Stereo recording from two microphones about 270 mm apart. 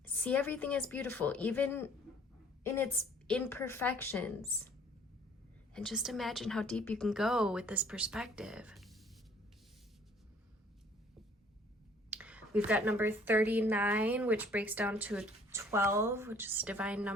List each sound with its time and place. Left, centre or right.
0.0 s a woman's voice: centre
5.7 s a woman's voice: centre
12.1 s a woman's voice: centre